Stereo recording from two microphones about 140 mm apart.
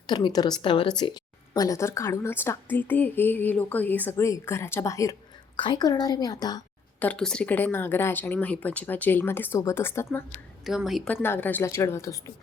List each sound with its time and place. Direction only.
0.1 s a woman's voice: 35° left (ahead or behind)
7.0 s speech: 5° left (ahead or behind)
10.6 s speech: centre (ahead or behind)
11.1 s speech: 15° left (ahead or behind)